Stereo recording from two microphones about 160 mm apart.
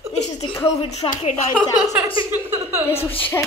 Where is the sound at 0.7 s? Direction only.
40° left (ahead or behind).